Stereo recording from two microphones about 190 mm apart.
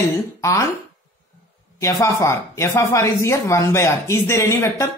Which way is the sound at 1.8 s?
15° left (ahead or behind).